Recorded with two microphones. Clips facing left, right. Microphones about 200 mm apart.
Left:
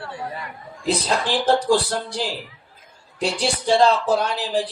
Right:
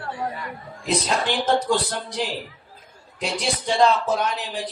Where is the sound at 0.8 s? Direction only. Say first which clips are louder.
Left 1 dB; 35° left (ahead or behind).